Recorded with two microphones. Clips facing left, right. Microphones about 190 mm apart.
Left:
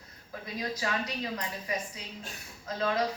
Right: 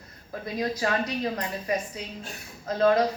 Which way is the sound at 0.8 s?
45° right (ahead or behind).